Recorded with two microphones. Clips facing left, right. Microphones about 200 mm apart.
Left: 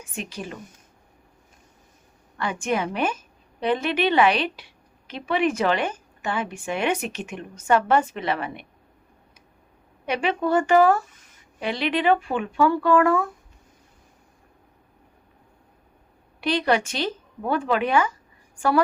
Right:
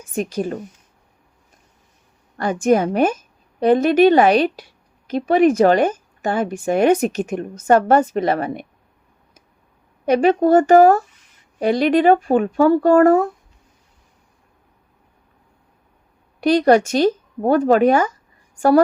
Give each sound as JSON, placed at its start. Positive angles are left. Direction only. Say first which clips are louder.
{"t": 0.1, "sound": "speech", "louder": "right 12 dB", "side_deg": -40}
{"t": 2.3, "sound": "a woman's voice", "louder": "right 9 dB", "side_deg": -40}
{"t": 10.1, "sound": "speech", "louder": "right 9 dB", "side_deg": -40}
{"t": 16.4, "sound": "speech", "louder": "right 9 dB", "side_deg": -45}